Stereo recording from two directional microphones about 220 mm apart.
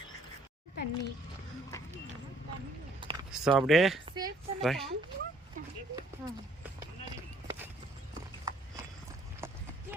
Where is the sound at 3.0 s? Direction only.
20° right (ahead or behind).